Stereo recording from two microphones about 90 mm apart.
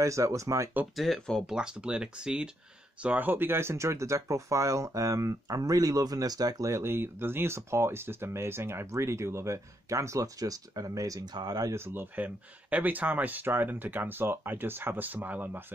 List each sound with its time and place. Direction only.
0.0 s speech: 35° right (ahead or behind)
0.9 s speech: centre (ahead or behind)
1.5 s speech: 10° right (ahead or behind); by 6.7 s 45° right (ahead or behind)
6.7 s speech: 25° right (ahead or behind); by 11.7 s 50° right (ahead or behind)
11.7 s speech: 25° right (ahead or behind)